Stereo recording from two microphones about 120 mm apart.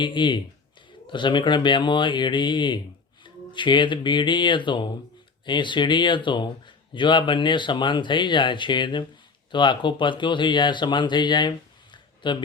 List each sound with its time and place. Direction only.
0.0 s speech: 40° left (ahead or behind)